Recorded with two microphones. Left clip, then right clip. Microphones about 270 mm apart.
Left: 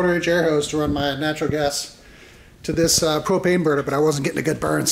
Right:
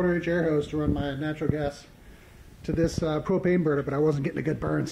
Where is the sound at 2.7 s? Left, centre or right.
Centre.